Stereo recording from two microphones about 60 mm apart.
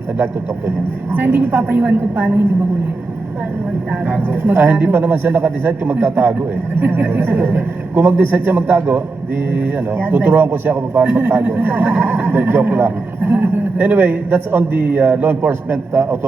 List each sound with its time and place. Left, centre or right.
1.1 s a man's voice: right
4.0 s a man's voice: right